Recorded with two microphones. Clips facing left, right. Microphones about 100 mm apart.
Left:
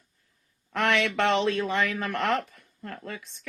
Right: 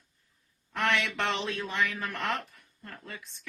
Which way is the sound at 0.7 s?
80° left.